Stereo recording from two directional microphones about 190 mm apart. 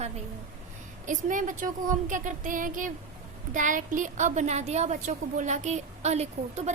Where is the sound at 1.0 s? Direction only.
45° right (ahead or behind).